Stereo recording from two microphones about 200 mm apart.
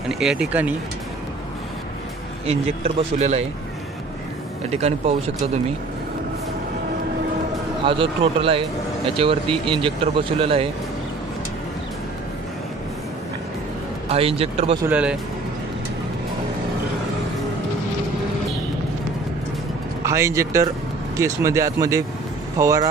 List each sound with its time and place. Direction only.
0.1 s speech: 5° right (ahead or behind)
2.4 s speech: 30° right (ahead or behind)
4.6 s speech: 30° right (ahead or behind)
7.8 s speech: 25° right (ahead or behind)
14.0 s speech: 30° right (ahead or behind)
14.9 s speech: 5° right (ahead or behind)
20.1 s speech: 15° right (ahead or behind)